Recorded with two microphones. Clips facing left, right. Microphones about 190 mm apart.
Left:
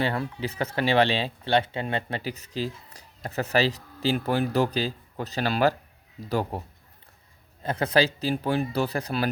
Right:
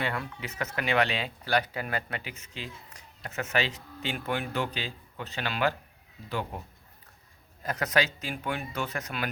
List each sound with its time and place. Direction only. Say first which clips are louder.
0.0 s speech: left 6 dB; 30° left (ahead or behind)
7.6 s speech: left 5 dB; 30° left (ahead or behind)